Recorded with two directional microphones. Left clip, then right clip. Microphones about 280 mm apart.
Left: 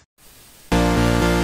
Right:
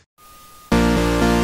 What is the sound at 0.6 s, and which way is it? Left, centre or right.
Music, centre.